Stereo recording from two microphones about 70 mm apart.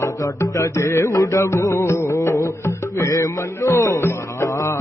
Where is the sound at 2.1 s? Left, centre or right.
Left.